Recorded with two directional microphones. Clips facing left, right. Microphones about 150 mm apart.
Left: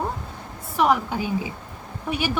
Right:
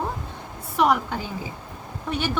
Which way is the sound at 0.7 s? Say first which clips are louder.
Even; centre (ahead or behind).